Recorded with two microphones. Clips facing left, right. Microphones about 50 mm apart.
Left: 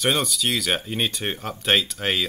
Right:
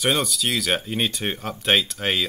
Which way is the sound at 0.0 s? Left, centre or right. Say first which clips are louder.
Even; centre.